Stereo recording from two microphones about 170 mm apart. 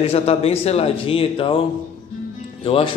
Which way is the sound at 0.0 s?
35° left (ahead or behind).